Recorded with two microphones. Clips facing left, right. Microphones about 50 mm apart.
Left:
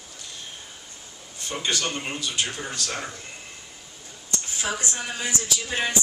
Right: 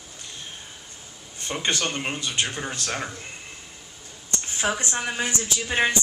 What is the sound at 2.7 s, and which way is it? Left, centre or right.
Speech, right.